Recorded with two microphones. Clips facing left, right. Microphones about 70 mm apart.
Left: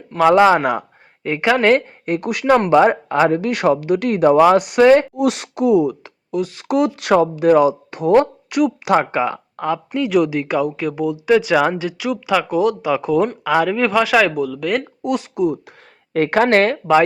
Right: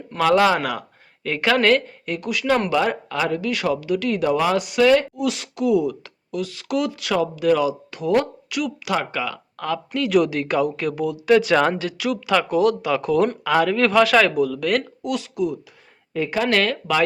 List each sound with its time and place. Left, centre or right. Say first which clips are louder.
0.2 s speech: left 5 dB; left
2.0 s speech: left 5 dB; left
2.5 s speech: left 8 dB; left
3.4 s speech: left 6 dB; left
4.8 s speech: left 4 dB; left
5.1 s speech: left 6 dB; left
9.6 s speech: left 3 dB; left
11.3 s speech: left 1 dB; centre
15.0 s speech: left 5 dB; left
16.1 s speech: left 7 dB; left
16.4 s speech: left 6 dB; left
16.7 s speech: left 8 dB; left